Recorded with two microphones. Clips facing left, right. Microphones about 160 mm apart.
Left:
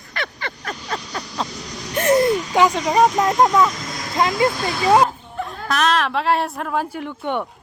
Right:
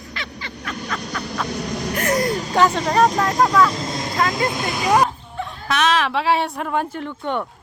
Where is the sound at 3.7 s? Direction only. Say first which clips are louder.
Right 4 dB; 30° right (ahead or behind).